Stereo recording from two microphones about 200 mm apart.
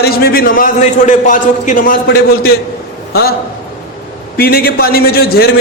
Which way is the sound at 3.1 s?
50° left (ahead or behind).